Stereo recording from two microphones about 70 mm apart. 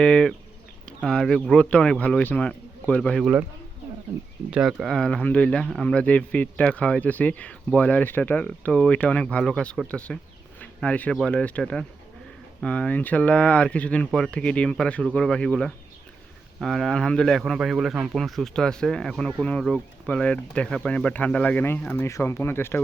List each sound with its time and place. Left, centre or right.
0.0 s speech: centre
4.5 s speech: centre
4.9 s speech: centre
16.6 s speech: centre
19.2 s speech: centre
22.0 s speech: left